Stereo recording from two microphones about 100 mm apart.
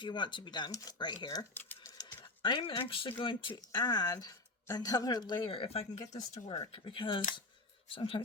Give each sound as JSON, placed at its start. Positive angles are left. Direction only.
{"t": 0.0, "sound": "speech", "side_deg": 50}
{"t": 2.4, "sound": "speech", "side_deg": 55}
{"t": 5.5, "sound": "speech", "side_deg": 75}
{"t": 6.0, "sound": "speech", "side_deg": 35}
{"t": 6.7, "sound": "speech", "side_deg": 65}